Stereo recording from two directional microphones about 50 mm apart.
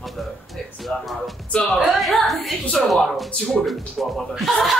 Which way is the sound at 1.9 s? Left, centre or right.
Centre.